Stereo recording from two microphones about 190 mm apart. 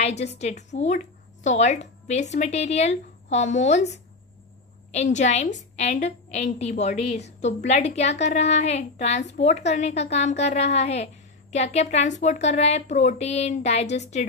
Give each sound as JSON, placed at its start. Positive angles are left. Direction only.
{"t": 0.0, "sound": "a woman's voice", "side_deg": 35}